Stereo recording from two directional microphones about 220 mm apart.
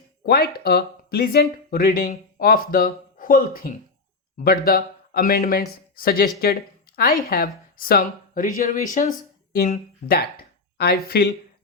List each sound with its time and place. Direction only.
0.2 s speech: 45° left (ahead or behind)